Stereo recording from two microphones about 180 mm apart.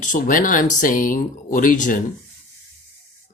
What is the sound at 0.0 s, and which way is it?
Speech, 45° left (ahead or behind).